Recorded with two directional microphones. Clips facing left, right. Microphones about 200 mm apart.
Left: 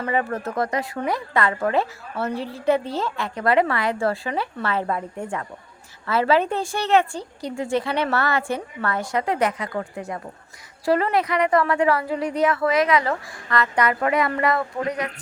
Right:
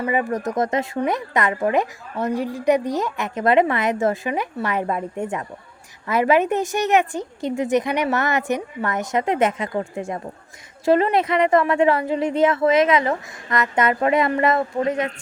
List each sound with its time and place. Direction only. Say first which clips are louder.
0.0 s speech: right 2 dB; 10° right (ahead or behind)